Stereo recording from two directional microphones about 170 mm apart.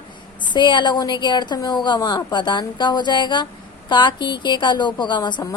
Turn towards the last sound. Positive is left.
turn(degrees=25)  # may be behind; listen again after turning